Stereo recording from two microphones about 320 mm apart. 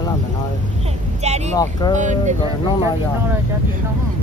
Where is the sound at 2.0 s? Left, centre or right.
Right.